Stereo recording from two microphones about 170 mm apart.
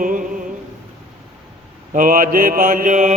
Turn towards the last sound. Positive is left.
turn(degrees=-50)  # may be behind; listen again after turning